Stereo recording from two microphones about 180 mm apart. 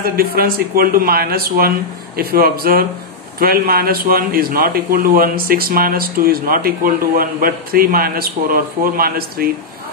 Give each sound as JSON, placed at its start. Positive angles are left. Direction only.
{"t": 0.0, "sound": "a man's voice", "side_deg": -55}